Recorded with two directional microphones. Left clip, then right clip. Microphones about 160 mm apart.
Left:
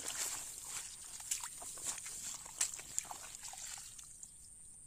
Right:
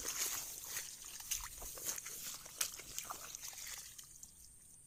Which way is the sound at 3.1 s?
25° left (ahead or behind).